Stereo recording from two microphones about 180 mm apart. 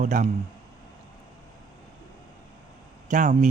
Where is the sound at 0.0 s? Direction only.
45° right (ahead or behind).